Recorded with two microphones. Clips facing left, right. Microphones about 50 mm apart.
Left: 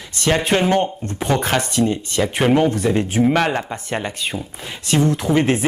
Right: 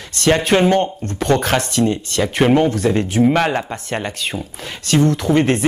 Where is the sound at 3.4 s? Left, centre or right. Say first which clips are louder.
Right 1 dB; centre.